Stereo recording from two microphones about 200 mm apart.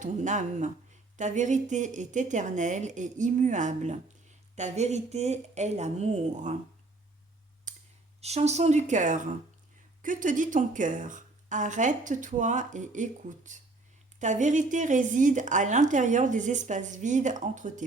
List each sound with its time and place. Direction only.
0.0 s speech: 35° right (ahead or behind)
8.2 s speech: 30° right (ahead or behind)